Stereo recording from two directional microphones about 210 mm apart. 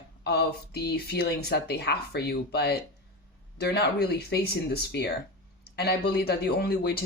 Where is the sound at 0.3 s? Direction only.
50° left (ahead or behind).